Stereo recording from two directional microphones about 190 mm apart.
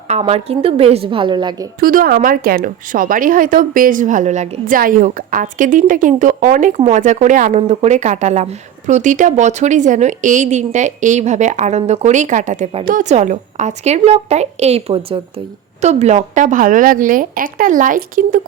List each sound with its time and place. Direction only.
0.1 s a woman's voice: 30° right (ahead or behind)
1.8 s a woman's voice: 50° right (ahead or behind)